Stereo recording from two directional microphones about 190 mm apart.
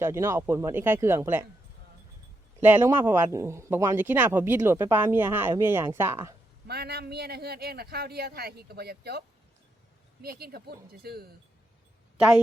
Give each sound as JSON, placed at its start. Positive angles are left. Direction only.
{"t": 0.0, "sound": "speech", "side_deg": -15}
{"t": 2.6, "sound": "speech", "side_deg": -10}
{"t": 6.7, "sound": "a man's voice", "side_deg": -55}
{"t": 10.2, "sound": "a man's voice", "side_deg": -55}
{"t": 12.1, "sound": "a woman's voice", "side_deg": -5}